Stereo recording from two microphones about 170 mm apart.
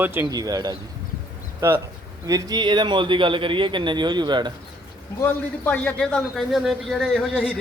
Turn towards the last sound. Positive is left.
turn(degrees=5)  # may be behind; listen again after turning